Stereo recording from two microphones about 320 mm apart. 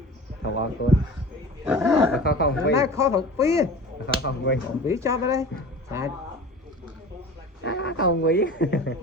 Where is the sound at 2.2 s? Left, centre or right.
Left.